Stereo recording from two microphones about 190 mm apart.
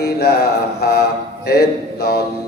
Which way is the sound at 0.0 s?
60° left (ahead or behind).